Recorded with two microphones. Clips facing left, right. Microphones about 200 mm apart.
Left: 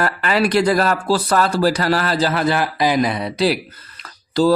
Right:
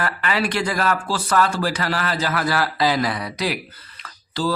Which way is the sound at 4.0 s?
40° left (ahead or behind).